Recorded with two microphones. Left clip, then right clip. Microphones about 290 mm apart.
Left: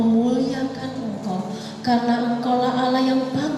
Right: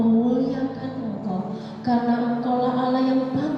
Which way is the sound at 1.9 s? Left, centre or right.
Centre.